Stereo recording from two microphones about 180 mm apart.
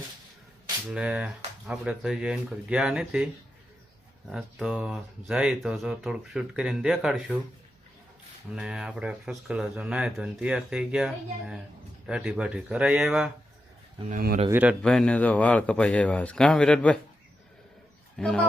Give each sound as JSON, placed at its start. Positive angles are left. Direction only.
{"t": 0.9, "sound": "speech", "side_deg": -5}
{"t": 4.3, "sound": "speech", "side_deg": 0}
{"t": 8.5, "sound": "speech", "side_deg": -5}
{"t": 14.1, "sound": "speech", "side_deg": -55}
{"t": 14.5, "sound": "speech", "side_deg": -5}
{"t": 14.8, "sound": "speech", "side_deg": 5}
{"t": 18.2, "sound": "speech", "side_deg": 5}